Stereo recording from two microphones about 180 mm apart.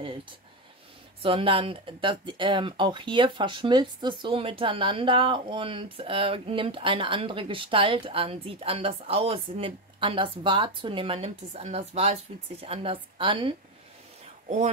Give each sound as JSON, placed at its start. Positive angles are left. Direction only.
{"t": 0.0, "sound": "speech", "side_deg": -30}